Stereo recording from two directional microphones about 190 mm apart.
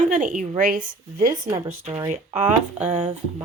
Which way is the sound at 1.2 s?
15° right (ahead or behind).